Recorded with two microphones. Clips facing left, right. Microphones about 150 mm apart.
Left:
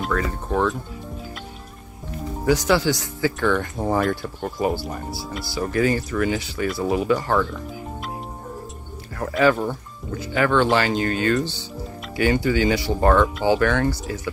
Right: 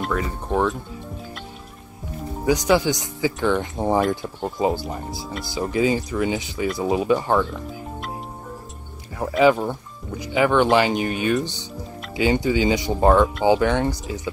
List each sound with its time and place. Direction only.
0.1 s speech: 10° right (ahead or behind)
2.4 s speech: 15° right (ahead or behind)
9.4 s speech: 15° right (ahead or behind)